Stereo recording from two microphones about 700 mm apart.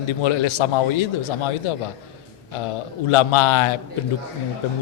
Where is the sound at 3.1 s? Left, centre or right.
Left.